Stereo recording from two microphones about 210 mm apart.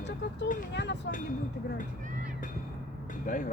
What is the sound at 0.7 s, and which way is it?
Speech, 55° left (ahead or behind).